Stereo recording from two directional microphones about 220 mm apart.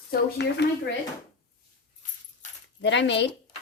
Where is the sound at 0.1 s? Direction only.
50° left (ahead or behind).